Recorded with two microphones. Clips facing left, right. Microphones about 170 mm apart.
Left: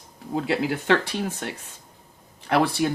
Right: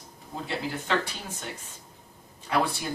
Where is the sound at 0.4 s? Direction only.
75° left (ahead or behind).